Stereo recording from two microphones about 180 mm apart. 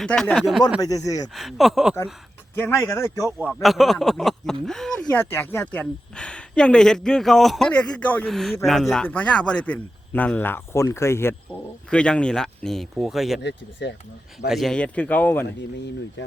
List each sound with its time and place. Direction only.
0.0 s speech: 5° left (ahead or behind)
0.8 s speech: 20° left (ahead or behind)
1.4 s speech: centre (ahead or behind)
2.6 s speech: 10° left (ahead or behind)
3.3 s speech: 5° right (ahead or behind)
13.4 s speech: 75° left (ahead or behind)
14.5 s speech: centre (ahead or behind)